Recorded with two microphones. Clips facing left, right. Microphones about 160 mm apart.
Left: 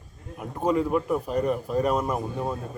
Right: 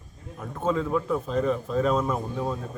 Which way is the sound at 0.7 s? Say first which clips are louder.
Left 2 dB; 10° left (ahead or behind).